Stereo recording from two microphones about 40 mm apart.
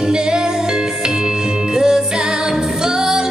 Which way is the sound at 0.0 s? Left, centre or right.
Centre.